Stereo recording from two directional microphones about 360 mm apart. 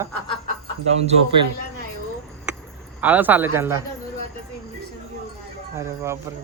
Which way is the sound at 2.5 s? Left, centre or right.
Centre.